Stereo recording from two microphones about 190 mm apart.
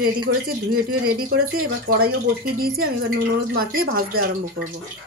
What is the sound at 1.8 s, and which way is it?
Speech, 50° right (ahead or behind).